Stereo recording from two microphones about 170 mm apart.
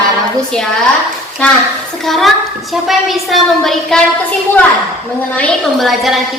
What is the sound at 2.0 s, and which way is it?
A woman's voice, centre (ahead or behind).